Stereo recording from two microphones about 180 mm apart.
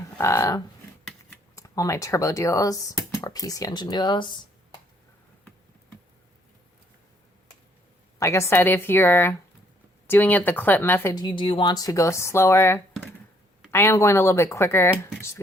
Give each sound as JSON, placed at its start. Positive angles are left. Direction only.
{"t": 0.2, "sound": "speech", "side_deg": 15}
{"t": 8.2, "sound": "speech", "side_deg": 15}